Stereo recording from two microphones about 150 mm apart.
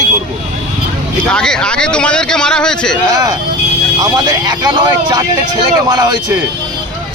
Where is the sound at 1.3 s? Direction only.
5° left (ahead or behind).